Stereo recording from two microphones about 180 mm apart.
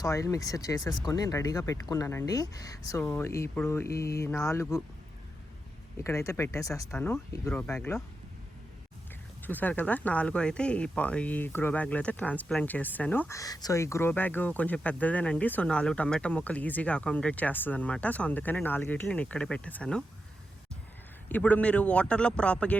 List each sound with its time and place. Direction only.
0.0 s speech: 20° left (ahead or behind)
6.0 s speech: 15° left (ahead or behind)
9.4 s speech: 10° left (ahead or behind)
21.2 s speech: 10° left (ahead or behind)